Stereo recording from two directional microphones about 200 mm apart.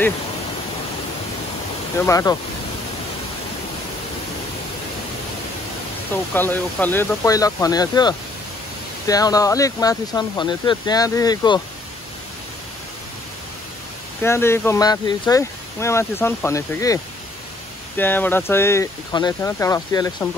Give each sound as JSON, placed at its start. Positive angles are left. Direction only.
{"t": 2.0, "sound": "speech", "side_deg": 15}
{"t": 6.3, "sound": "speech", "side_deg": 10}
{"t": 14.2, "sound": "speech", "side_deg": 10}